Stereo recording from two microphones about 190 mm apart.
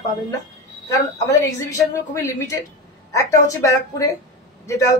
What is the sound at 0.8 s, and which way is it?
A woman's voice, 20° left (ahead or behind).